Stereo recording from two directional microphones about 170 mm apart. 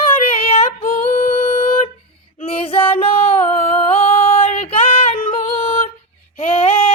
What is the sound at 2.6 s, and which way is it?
Female singing, 35° left (ahead or behind).